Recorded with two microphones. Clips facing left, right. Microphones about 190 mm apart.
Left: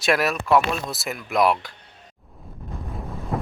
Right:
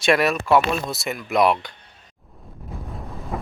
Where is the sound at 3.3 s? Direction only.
Centre (ahead or behind).